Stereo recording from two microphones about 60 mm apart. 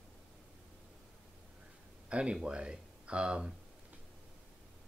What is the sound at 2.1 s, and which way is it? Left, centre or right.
Speech, centre.